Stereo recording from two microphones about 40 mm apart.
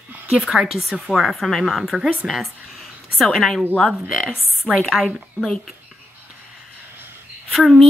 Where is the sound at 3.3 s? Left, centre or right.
Centre.